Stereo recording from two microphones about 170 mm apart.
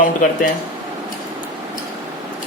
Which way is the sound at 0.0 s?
50° left (ahead or behind).